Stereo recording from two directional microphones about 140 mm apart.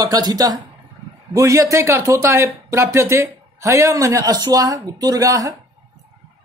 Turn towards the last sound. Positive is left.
turn(degrees=-25)  # may be behind; listen again after turning